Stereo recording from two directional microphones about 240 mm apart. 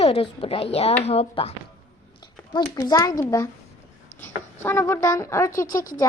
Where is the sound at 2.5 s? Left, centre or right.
Centre.